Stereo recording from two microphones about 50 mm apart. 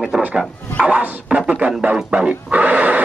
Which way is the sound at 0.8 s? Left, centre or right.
Right.